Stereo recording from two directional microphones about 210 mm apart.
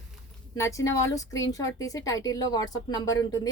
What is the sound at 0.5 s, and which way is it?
Speech, 15° left (ahead or behind).